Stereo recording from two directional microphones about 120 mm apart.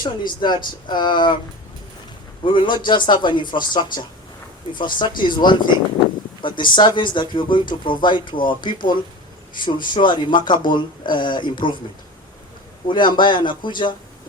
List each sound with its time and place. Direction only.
0.0 s speech: 40° left (ahead or behind)
2.4 s speech: 45° left (ahead or behind)
12.9 s speech: 40° left (ahead or behind)